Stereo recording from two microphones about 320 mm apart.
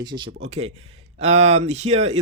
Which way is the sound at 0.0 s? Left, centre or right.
Centre.